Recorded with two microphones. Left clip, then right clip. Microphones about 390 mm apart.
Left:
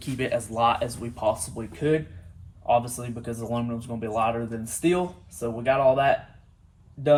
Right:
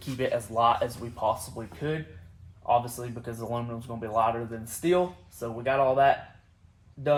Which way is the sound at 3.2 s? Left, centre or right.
Centre.